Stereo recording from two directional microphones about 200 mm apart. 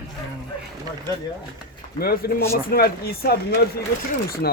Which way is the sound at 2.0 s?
50° left (ahead or behind).